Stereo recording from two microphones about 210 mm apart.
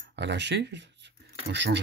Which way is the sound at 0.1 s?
55° right (ahead or behind).